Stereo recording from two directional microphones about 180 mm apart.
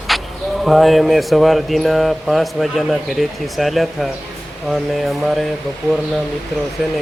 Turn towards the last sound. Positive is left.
turn(degrees=0)  # may be behind; listen again after turning